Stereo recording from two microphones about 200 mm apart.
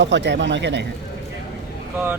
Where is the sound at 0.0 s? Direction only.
60° right (ahead or behind).